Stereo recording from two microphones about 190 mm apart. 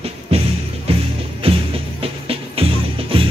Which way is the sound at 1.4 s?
30° right (ahead or behind).